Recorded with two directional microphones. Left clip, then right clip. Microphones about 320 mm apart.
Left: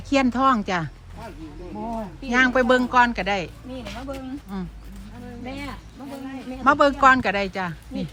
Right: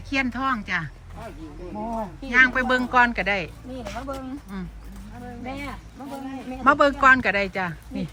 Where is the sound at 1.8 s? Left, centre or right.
Right.